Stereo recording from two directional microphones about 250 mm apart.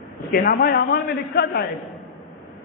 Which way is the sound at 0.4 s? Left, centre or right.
Left.